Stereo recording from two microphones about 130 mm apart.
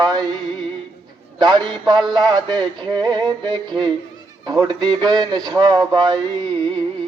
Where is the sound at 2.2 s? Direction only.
35° right (ahead or behind).